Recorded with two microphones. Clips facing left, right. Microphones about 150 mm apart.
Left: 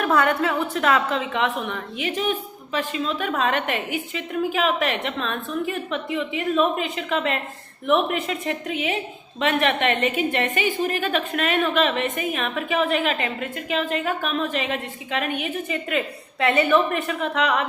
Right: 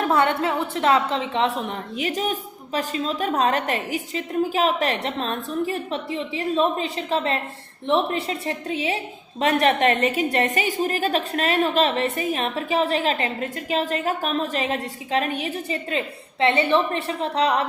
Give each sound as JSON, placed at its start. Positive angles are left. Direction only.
{"t": 0.0, "sound": "a woman's voice", "side_deg": -25}